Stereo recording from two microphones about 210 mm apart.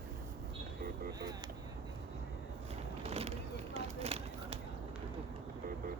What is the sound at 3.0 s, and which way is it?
Vehicle, 30° right (ahead or behind).